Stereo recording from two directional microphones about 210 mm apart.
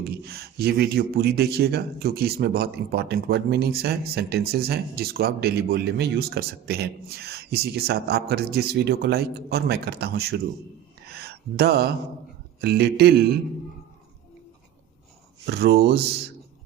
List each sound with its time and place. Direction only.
0.1 s speech: 50° right (ahead or behind)
11.1 s a sound: 50° right (ahead or behind)
12.5 s speech: 50° right (ahead or behind)
15.4 s speech: 50° right (ahead or behind)